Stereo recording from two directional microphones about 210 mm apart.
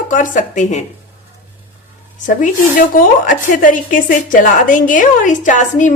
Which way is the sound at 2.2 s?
40° left (ahead or behind).